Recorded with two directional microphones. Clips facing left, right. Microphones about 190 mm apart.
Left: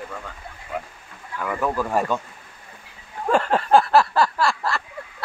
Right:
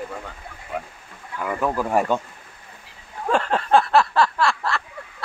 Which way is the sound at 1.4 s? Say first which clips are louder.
Right 1 dB; 15° right (ahead or behind).